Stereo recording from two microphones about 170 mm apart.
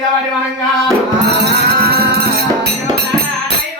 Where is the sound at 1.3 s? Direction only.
75° right (ahead or behind).